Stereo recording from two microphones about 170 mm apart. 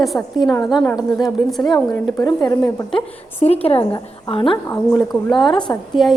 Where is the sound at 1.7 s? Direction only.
15° left (ahead or behind).